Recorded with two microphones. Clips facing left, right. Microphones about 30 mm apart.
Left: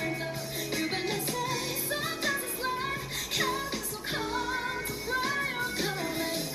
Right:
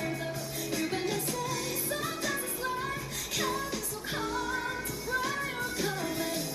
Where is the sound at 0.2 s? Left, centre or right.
Left.